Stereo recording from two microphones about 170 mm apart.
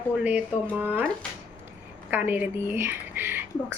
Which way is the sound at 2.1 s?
10° right (ahead or behind).